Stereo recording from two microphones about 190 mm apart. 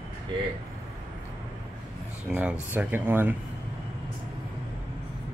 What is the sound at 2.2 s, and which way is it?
Speech, 10° right (ahead or behind).